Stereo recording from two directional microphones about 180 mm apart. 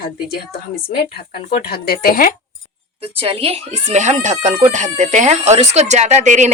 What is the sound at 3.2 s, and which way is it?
Speech, 30° right (ahead or behind).